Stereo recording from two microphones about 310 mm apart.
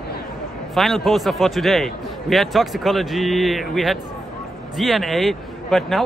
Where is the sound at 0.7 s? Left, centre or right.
Centre.